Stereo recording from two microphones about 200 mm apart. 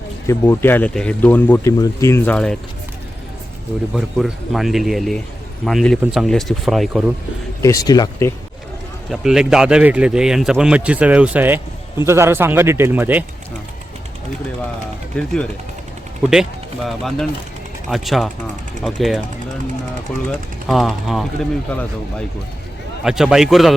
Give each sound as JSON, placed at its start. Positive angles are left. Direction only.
{"t": 0.3, "sound": "speech", "side_deg": 10}
{"t": 3.9, "sound": "speech", "side_deg": 0}
{"t": 7.6, "sound": "speech", "side_deg": 15}
{"t": 9.0, "sound": "a man's voice", "side_deg": 0}
{"t": 15.1, "sound": "speech", "side_deg": 5}
{"t": 23.0, "sound": "speech", "side_deg": -5}